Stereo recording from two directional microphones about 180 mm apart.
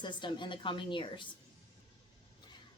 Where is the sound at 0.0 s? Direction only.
25° left (ahead or behind).